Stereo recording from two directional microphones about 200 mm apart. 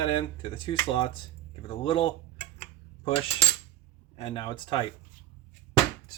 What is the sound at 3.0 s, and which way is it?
Cutlery, 25° left (ahead or behind).